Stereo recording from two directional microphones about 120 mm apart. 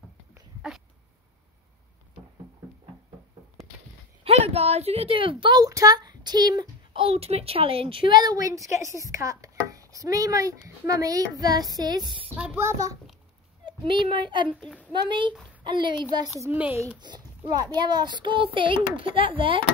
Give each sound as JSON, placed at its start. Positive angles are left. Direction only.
{"t": 0.6, "sound": "dog", "side_deg": -5}
{"t": 4.2, "sound": "a woman's voice", "side_deg": -60}
{"t": 7.0, "sound": "a woman's voice", "side_deg": -55}
{"t": 11.3, "sound": "child singing", "side_deg": -35}
{"t": 13.7, "sound": "a child's voice", "side_deg": -45}
{"t": 14.5, "sound": "a child's voice", "side_deg": 10}
{"t": 15.0, "sound": "child singing", "side_deg": -40}
{"t": 16.5, "sound": "speech", "side_deg": -10}
{"t": 17.5, "sound": "a child's voice", "side_deg": -35}